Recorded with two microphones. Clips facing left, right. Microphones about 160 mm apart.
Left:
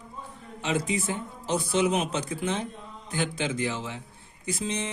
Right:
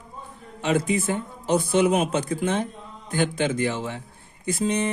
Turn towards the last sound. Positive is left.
turn(degrees=-55)  # may be behind; listen again after turning